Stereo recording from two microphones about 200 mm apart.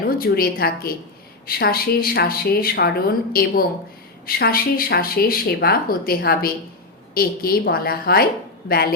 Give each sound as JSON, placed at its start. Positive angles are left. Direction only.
{"t": 0.2, "sound": "speech", "side_deg": 50}